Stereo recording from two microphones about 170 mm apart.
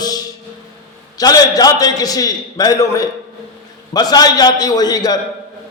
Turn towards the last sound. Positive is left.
turn(degrees=20)  # may be behind; listen again after turning